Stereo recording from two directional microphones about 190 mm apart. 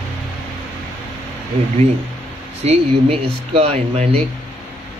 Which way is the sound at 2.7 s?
30° right (ahead or behind).